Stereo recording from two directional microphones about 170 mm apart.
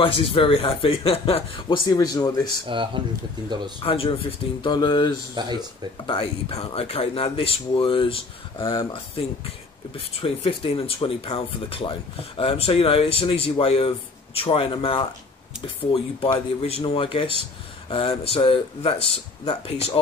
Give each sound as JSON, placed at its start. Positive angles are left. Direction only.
{"t": 0.0, "sound": "speech", "side_deg": 30}
{"t": 2.7, "sound": "speech", "side_deg": -30}
{"t": 3.8, "sound": "speech", "side_deg": 35}
{"t": 5.4, "sound": "speech", "side_deg": -25}
{"t": 6.0, "sound": "speech", "side_deg": 35}